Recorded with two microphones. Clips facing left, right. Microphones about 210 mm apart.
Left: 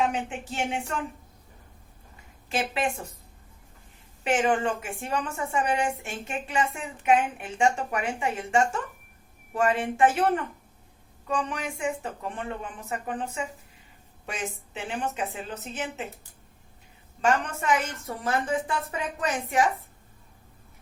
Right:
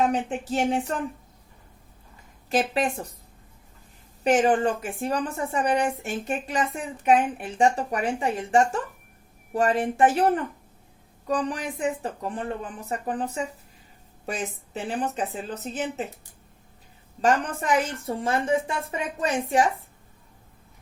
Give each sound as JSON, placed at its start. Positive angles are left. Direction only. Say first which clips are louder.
{"t": 0.0, "sound": "a woman's voice", "louder": "right 3 dB", "side_deg": -40}
{"t": 2.5, "sound": "a woman's voice", "louder": "right 4 dB", "side_deg": -40}
{"t": 4.2, "sound": "a woman's voice", "louder": "right 4 dB", "side_deg": -35}
{"t": 11.3, "sound": "a woman's voice", "louder": "right 3 dB", "side_deg": -35}
{"t": 17.2, "sound": "a woman's voice", "louder": "right 2 dB", "side_deg": -35}